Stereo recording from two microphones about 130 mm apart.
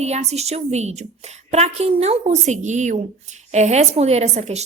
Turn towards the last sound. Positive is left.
turn(degrees=-55)  # may be behind; listen again after turning